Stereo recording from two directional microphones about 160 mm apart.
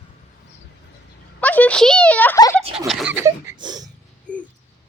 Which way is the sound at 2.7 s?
Centre (ahead or behind).